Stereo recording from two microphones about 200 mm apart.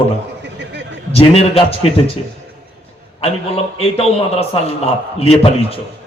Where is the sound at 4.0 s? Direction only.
30° left (ahead or behind).